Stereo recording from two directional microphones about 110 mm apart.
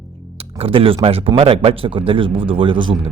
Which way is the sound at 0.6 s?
55° right (ahead or behind).